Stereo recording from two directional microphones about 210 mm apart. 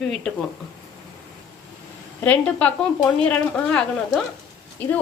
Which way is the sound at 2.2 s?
5° left (ahead or behind).